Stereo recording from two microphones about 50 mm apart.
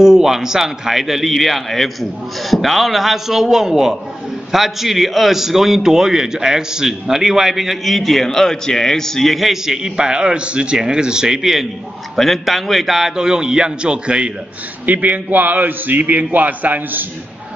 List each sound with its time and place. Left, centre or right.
0.0 s a man's voice: centre
14.9 s a man's voice: right